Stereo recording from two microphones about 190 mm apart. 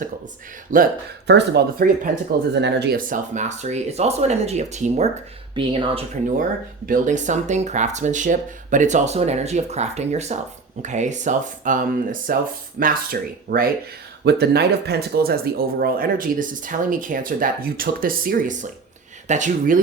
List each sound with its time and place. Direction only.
0.7 s speech: 45° right (ahead or behind)
1.3 s speech: 60° right (ahead or behind)
2.5 s speech: 65° right (ahead or behind); by 5.0 s 35° right (ahead or behind)
5.5 s speech: 25° right (ahead or behind)
6.8 s speech: 45° right (ahead or behind)